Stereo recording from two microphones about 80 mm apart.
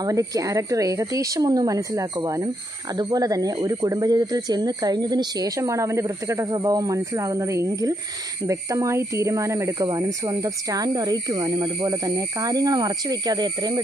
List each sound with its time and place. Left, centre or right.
0.0 s speech: right
5.6 s speech: right
6.5 s speech: right